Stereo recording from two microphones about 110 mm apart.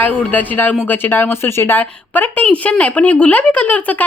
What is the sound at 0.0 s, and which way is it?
A woman's voice, 15° left (ahead or behind).